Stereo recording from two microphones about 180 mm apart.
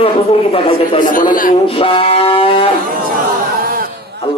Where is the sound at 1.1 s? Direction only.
50° left (ahead or behind).